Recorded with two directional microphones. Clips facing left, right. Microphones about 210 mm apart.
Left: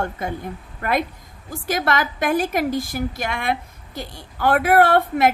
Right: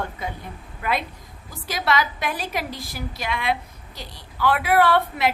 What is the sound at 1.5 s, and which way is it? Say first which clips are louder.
A woman's voice: left 2 dB; 50° left (ahead or behind).